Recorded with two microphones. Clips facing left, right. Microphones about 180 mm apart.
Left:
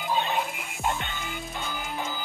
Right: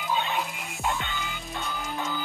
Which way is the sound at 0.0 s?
40° left (ahead or behind).